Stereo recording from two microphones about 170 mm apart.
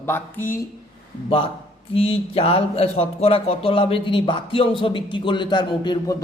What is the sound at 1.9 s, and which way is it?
A man's voice, 35° left (ahead or behind).